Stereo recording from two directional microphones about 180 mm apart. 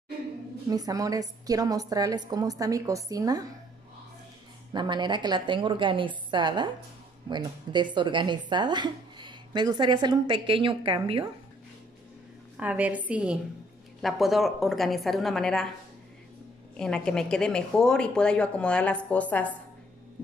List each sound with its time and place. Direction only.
0.7 s speech: 20° right (ahead or behind)
4.7 s speech: 25° right (ahead or behind)
12.5 s a woman's voice: 10° right (ahead or behind)
16.7 s a woman's voice: 5° left (ahead or behind)